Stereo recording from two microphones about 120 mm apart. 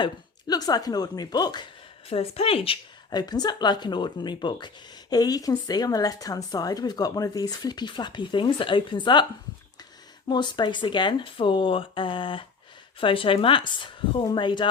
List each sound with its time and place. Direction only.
0.0 s speech: 35° left (ahead or behind)
2.0 s speech: 55° left (ahead or behind)
3.1 s speech: 35° left (ahead or behind)
10.2 s speech: 40° left (ahead or behind)